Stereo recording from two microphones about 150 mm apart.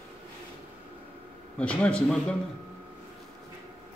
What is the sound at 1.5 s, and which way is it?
Speech, 5° left (ahead or behind).